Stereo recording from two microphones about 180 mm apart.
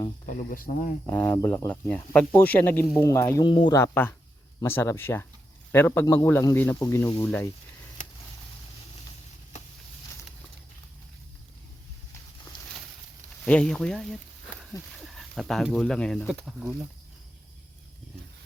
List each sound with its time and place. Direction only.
0.3 s speech: 45° left (ahead or behind)
1.0 s speech: 10° left (ahead or behind); by 3.8 s 25° left (ahead or behind)
3.8 s speech: 10° left (ahead or behind)
12.5 s a sound: 25° left (ahead or behind)
13.4 s speech: 5° left (ahead or behind)